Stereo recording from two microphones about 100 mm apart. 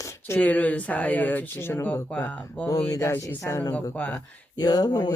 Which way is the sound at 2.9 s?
30° left (ahead or behind).